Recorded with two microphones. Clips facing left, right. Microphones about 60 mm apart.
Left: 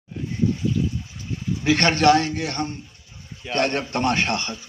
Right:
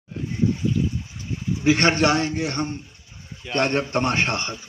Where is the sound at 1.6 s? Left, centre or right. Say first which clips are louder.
Even; right.